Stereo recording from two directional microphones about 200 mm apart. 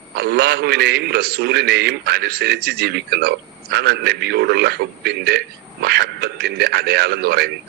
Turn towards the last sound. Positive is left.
turn(degrees=-55)  # may be behind; listen again after turning